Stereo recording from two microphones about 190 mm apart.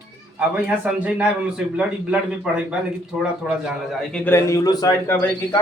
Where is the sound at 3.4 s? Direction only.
5° right (ahead or behind).